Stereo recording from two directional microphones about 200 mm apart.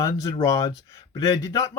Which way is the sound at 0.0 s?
15° left (ahead or behind).